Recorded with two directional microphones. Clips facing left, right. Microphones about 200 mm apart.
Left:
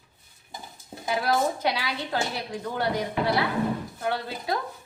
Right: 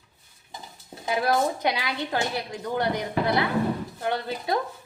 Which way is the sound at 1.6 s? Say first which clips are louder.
Right 1 dB; 15° right (ahead or behind).